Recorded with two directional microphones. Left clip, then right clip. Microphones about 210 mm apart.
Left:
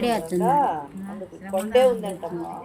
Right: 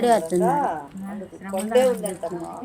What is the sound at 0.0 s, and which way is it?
A woman's voice, centre (ahead or behind).